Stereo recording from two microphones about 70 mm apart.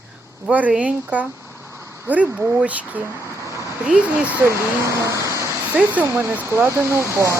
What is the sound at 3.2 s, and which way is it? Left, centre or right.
Vehicle, right.